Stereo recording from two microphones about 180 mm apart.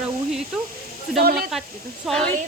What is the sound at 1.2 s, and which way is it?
Speech, 60° right (ahead or behind).